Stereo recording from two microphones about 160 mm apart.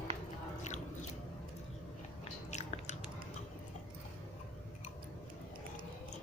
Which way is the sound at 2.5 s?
45° left (ahead or behind).